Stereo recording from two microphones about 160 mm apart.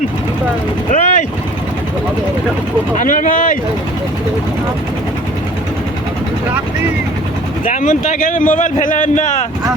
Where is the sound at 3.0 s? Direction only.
55° left (ahead or behind).